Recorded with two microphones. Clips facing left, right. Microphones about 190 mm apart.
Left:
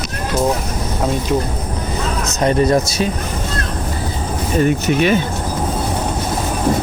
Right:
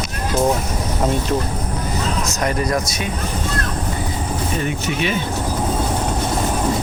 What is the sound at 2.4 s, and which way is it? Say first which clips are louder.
Speech: left 8 dB; 25° left (ahead or behind).